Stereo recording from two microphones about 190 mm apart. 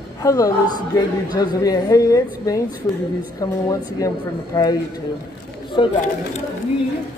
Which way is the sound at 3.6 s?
20° left (ahead or behind).